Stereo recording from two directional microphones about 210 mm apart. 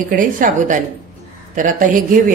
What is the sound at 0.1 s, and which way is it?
Speech, 40° right (ahead or behind).